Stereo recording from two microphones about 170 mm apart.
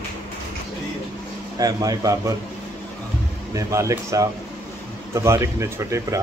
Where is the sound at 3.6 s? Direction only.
20° right (ahead or behind).